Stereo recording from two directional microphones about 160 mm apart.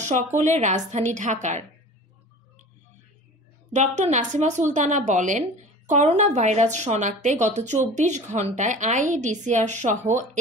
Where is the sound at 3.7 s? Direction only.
45° right (ahead or behind).